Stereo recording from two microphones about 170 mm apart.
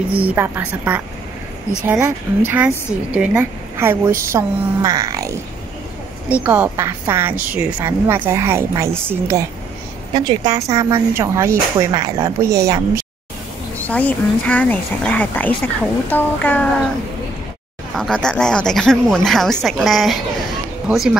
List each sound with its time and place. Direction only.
0.1 s a woman's voice: 10° right (ahead or behind)
6.2 s a woman's voice: 10° right (ahead or behind)
13.8 s speech: 10° left (ahead or behind)
17.9 s speech: 5° left (ahead or behind)